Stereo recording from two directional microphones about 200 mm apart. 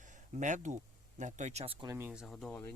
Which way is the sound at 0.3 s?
40° right (ahead or behind).